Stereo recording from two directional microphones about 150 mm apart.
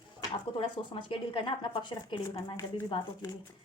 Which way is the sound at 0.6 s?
35° left (ahead or behind).